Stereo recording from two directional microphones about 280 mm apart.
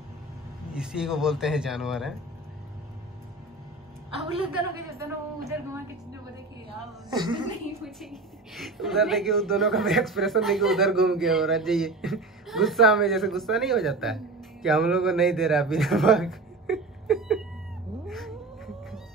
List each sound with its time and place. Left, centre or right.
0.7 s a man's voice: centre
4.7 s a woman's voice: centre
7.1 s a woman's voice: centre
8.5 s a man's voice: centre
18.0 s cat: centre